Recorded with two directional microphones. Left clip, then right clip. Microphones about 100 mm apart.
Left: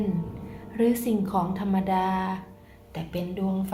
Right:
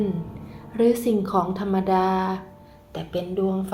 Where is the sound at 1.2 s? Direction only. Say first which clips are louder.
Right 4 dB; 45° right (ahead or behind).